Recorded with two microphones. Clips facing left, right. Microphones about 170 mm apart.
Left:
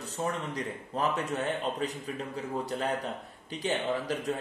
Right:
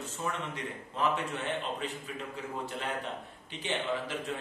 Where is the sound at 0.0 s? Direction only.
40° left (ahead or behind).